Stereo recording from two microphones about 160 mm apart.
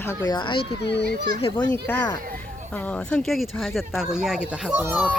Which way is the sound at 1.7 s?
10° left (ahead or behind).